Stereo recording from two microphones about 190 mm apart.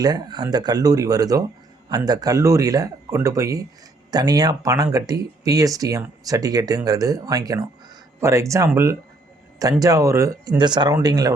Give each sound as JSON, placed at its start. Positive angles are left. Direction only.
{"t": 0.0, "sound": "speech", "side_deg": -20}